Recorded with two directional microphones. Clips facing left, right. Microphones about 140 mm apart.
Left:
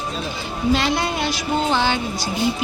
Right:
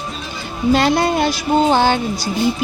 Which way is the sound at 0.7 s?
45° right (ahead or behind).